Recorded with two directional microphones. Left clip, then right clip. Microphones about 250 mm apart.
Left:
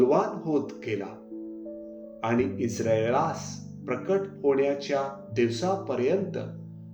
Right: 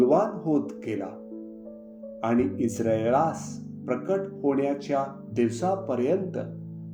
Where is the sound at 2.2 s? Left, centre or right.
Right.